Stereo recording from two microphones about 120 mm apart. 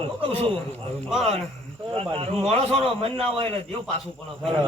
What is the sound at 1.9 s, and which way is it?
A man's voice, 50° right (ahead or behind).